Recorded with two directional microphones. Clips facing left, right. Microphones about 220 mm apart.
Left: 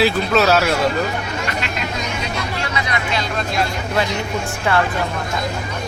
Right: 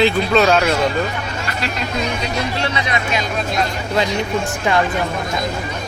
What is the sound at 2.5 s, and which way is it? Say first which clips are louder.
Speech: right 2 dB; 25° right (ahead or behind).